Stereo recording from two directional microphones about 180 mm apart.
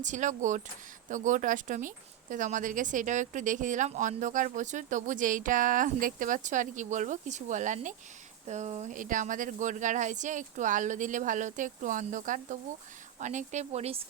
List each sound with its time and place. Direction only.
0.0 s a woman's voice: 45° right (ahead or behind)